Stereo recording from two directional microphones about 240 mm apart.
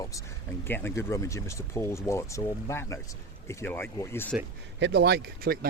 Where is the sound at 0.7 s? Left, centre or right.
Centre.